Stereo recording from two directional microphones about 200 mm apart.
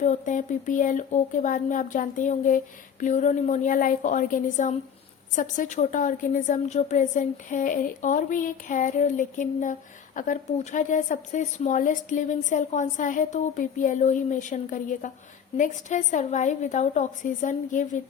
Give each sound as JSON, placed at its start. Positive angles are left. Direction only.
{"t": 0.0, "sound": "a woman's voice", "side_deg": 35}